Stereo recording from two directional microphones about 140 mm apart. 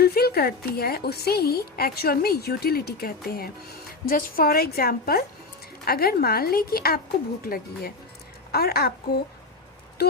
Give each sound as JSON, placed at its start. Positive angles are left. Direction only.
{"t": 0.0, "sound": "a woman's voice", "side_deg": 90}